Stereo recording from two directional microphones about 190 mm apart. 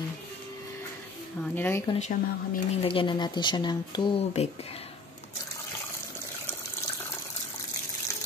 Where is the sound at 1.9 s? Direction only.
40° left (ahead or behind).